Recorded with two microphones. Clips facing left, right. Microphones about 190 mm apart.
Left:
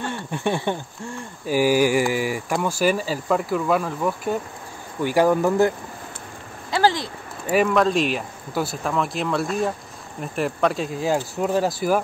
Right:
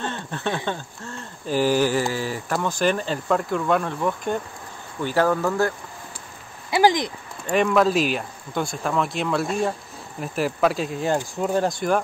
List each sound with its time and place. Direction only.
0.0 s a sound: 15° left (ahead or behind)
0.7 s speech: 15° left (ahead or behind)
6.7 s speech: 15° right (ahead or behind)
7.4 s speech: 5° left (ahead or behind)